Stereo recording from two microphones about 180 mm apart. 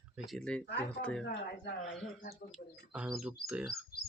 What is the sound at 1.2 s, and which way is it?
Speech, 70° left (ahead or behind).